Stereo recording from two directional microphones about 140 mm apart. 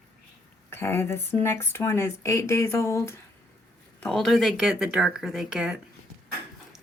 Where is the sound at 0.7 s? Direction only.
15° left (ahead or behind).